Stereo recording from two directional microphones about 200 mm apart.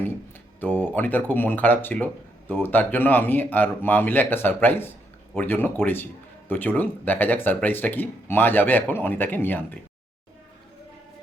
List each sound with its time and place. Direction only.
0.6 s speech: 10° left (ahead or behind)